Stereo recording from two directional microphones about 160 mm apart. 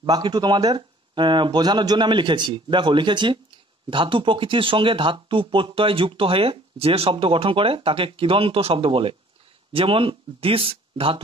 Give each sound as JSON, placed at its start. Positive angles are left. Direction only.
{"t": 0.0, "sound": "speech", "side_deg": -25}